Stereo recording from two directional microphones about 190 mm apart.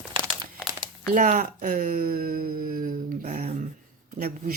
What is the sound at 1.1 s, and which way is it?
Speech, 45° right (ahead or behind).